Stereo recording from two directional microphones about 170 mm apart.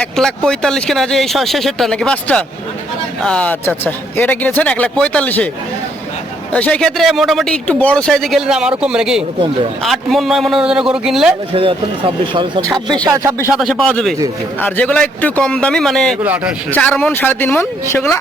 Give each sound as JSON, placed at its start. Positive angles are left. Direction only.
{"t": 0.0, "sound": "a man's voice", "side_deg": 5}
{"t": 6.5, "sound": "speech", "side_deg": 10}
{"t": 11.5, "sound": "a man's voice", "side_deg": -30}
{"t": 13.5, "sound": "a man's voice", "side_deg": 0}
{"t": 16.2, "sound": "speech", "side_deg": -10}
{"t": 16.7, "sound": "a man's voice", "side_deg": 5}